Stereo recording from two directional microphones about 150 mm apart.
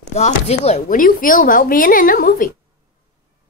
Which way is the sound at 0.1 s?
45° left (ahead or behind).